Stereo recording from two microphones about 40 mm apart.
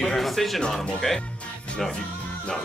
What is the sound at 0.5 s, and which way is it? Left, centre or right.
Speech, centre.